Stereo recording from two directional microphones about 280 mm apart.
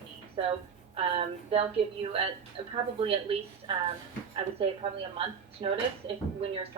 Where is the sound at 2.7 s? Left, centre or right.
Centre.